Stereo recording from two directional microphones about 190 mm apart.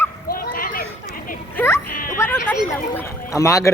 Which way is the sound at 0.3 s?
50° left (ahead or behind).